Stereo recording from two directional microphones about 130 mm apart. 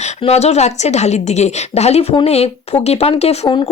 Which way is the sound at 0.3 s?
55° left (ahead or behind).